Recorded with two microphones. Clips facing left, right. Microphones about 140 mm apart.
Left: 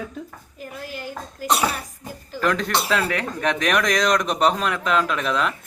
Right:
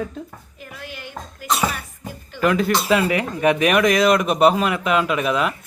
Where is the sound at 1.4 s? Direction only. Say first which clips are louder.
Left 1 dB; 65° left (ahead or behind).